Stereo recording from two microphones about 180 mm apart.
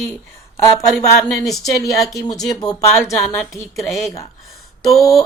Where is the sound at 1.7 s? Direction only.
20° left (ahead or behind).